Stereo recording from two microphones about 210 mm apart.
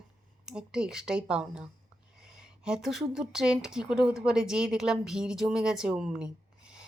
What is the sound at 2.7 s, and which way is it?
Speech, centre (ahead or behind).